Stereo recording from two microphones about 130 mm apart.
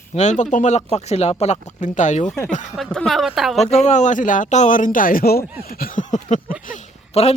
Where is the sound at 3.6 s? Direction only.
60° left (ahead or behind).